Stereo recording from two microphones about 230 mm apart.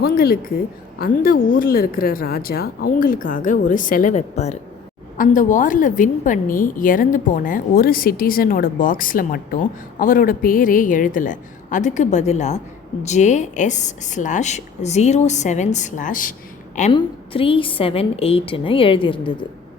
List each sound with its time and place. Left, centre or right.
0.0 s a woman's voice: left
16.9 s a woman's voice: left